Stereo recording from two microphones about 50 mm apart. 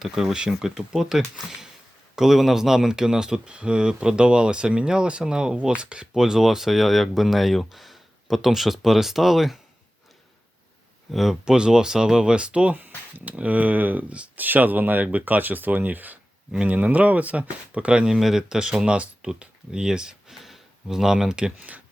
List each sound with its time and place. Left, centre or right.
0.0 s speech: centre
6.1 s speech: centre
11.1 s speech: centre
11.4 s speech: centre